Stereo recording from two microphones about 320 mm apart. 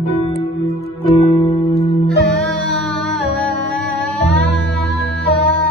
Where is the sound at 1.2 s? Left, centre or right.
Centre.